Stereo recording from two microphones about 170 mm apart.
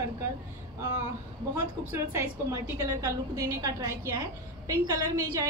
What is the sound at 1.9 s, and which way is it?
A woman's voice, 15° right (ahead or behind).